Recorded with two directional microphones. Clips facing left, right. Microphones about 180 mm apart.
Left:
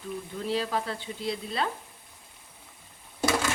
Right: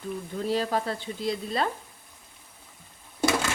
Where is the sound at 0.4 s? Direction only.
40° right (ahead or behind).